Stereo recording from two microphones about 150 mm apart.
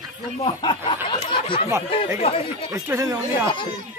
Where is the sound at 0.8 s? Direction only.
35° left (ahead or behind).